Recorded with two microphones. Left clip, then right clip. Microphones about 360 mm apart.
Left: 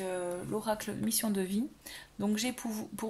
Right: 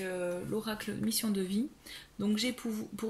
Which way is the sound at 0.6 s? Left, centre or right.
Centre.